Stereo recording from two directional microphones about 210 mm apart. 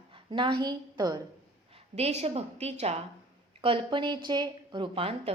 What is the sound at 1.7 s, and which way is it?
A woman's voice, 30° right (ahead or behind).